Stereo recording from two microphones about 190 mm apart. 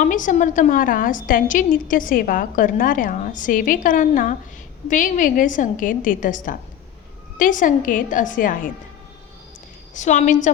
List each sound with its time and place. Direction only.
0.0 s a woman's voice: 45° left (ahead or behind)
9.9 s a woman's voice: 40° left (ahead or behind)